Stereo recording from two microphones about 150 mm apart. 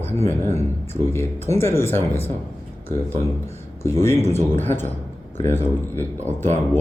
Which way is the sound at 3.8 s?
20° left (ahead or behind).